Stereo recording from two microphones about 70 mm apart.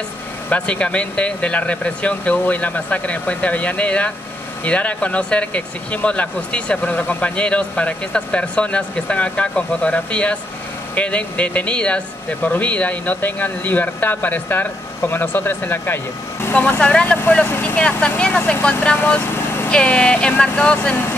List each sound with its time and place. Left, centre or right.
0.5 s speech: centre
16.5 s speech: centre
19.3 s a sound: left
19.7 s speech: centre